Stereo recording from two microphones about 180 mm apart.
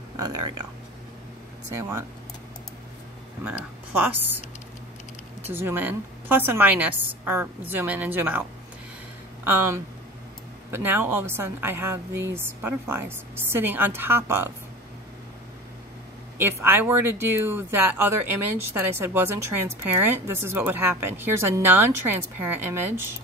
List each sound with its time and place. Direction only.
1.8 s speech: 15° right (ahead or behind)
3.4 s speech: 10° right (ahead or behind)
5.5 s speech: 10° right (ahead or behind)
16.3 s speech: 10° right (ahead or behind)